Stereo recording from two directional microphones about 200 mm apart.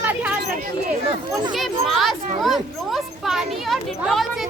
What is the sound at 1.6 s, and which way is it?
A child's voice, centre (ahead or behind).